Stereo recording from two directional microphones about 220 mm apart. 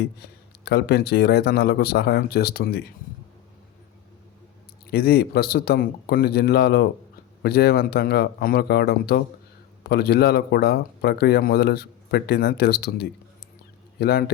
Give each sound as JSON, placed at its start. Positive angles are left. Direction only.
{"t": 0.2, "sound": "speech", "side_deg": 50}
{"t": 4.9, "sound": "speech", "side_deg": 45}